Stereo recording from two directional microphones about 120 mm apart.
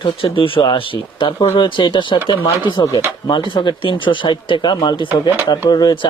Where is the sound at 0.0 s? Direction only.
50° left (ahead or behind).